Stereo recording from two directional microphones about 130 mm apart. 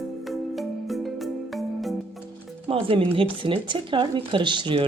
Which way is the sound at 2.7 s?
45° right (ahead or behind).